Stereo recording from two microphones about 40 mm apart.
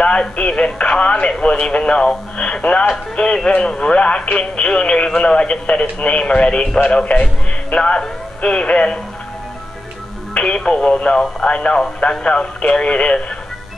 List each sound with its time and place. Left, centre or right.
0.0 s speech: left
10.4 s speech: left